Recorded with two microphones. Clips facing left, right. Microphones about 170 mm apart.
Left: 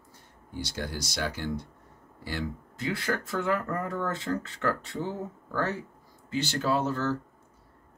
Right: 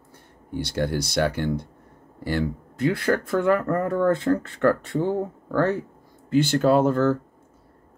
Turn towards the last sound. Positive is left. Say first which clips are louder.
# right 9 dB
turn(degrees=-55)  # may be behind; listen again after turning